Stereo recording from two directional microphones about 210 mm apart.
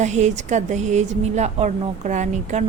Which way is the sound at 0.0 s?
35° right (ahead or behind).